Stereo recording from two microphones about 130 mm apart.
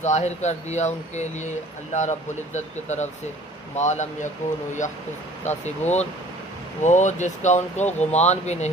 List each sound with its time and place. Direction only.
0.0 s speech: 60° left (ahead or behind)
5.5 s speech: 60° left (ahead or behind)